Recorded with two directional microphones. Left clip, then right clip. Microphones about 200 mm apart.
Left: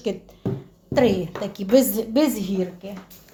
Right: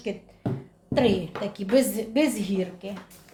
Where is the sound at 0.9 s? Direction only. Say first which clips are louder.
Left 4 dB; 25° left (ahead or behind).